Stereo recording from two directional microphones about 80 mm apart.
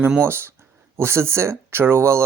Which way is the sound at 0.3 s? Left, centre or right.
Right.